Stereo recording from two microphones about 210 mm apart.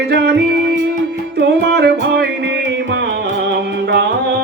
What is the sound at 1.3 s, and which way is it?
Music, 50° right (ahead or behind).